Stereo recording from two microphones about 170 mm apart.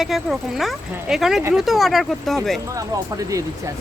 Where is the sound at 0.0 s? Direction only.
Centre (ahead or behind).